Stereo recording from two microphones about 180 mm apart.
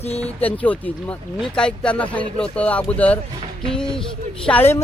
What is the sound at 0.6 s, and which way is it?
Speech, 5° left (ahead or behind).